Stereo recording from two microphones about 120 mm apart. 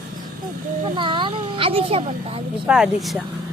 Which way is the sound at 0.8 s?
45° right (ahead or behind).